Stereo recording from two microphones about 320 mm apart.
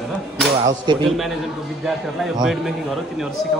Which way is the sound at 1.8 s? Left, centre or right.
Centre.